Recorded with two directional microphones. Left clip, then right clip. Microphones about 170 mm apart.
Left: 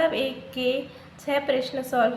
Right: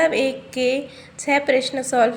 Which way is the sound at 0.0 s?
30° right (ahead or behind).